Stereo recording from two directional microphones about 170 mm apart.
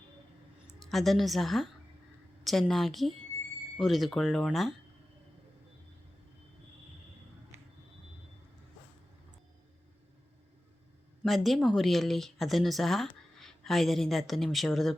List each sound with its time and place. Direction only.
0.8 s speech: centre (ahead or behind)
11.2 s speech: centre (ahead or behind)